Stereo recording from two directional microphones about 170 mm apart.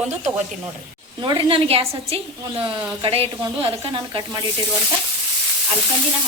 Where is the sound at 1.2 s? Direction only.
30° right (ahead or behind).